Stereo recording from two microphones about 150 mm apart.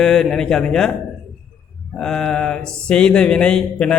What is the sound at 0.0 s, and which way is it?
Mantra, 5° left (ahead or behind).